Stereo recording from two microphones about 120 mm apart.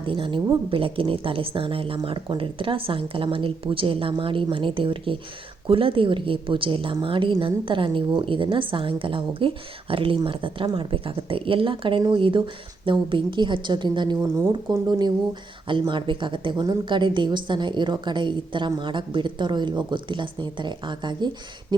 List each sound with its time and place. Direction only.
0.0 s a woman's voice: 45° right (ahead or behind)
14.2 s speech: 25° right (ahead or behind)
14.7 s a woman's voice: 35° right (ahead or behind)